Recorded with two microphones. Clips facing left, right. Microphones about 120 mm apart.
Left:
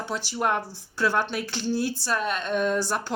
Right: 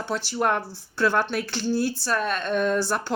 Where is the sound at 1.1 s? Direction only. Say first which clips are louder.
Right 2 dB; 55° right (ahead or behind).